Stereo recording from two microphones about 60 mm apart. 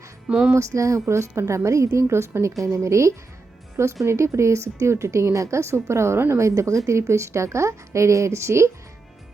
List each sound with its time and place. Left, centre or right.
0.3 s music: centre
0.5 s a woman's voice: right
6.6 s a woman's voice: right